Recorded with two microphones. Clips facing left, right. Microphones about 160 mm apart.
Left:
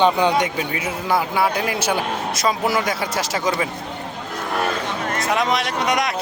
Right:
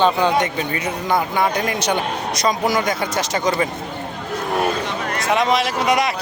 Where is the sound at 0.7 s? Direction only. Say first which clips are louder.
Right 1 dB; 5° left (ahead or behind).